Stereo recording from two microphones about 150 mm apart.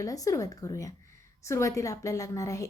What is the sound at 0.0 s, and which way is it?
A woman's voice, 20° left (ahead or behind).